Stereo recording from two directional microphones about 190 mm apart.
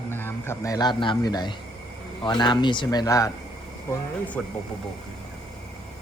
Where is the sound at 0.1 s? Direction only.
10° left (ahead or behind).